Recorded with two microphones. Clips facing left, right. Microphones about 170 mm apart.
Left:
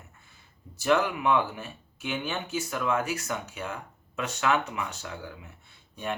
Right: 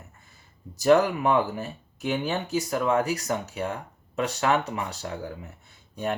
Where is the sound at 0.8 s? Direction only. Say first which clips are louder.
Right 5 dB; 40° right (ahead or behind).